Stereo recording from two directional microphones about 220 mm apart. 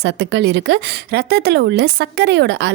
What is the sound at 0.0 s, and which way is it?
Speech, 55° right (ahead or behind).